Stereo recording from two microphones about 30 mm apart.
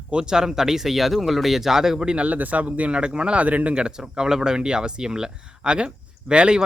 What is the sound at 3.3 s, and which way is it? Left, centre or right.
Speech, right.